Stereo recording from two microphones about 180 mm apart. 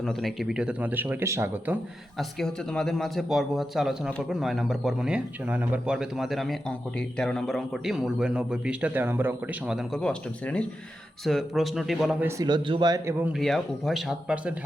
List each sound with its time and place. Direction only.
0.0 s speech: centre (ahead or behind)
2.1 s a man's voice: centre (ahead or behind)
12.5 s speech: 25° right (ahead or behind); by 14.5 s 5° right (ahead or behind)